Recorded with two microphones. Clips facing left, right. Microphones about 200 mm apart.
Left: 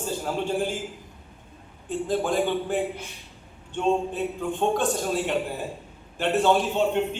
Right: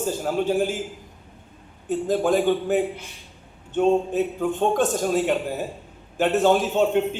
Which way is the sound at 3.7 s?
45° right (ahead or behind).